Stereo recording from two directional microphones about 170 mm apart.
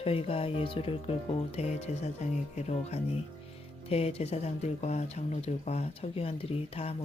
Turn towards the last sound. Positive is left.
turn(degrees=35)  # may be behind; listen again after turning